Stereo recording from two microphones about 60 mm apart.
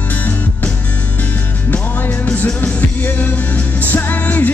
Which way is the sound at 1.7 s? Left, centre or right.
Left.